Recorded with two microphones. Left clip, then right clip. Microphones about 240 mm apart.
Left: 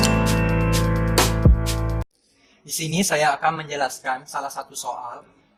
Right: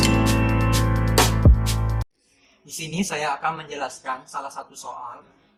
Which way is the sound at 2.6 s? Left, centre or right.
Left.